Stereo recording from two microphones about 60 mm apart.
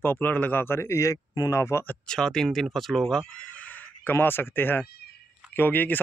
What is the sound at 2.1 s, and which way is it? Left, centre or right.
Speech, centre.